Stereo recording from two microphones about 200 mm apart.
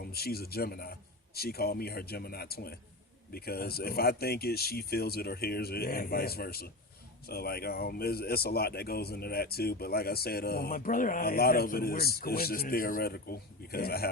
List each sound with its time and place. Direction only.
0.0 s speech: 50° left (ahead or behind)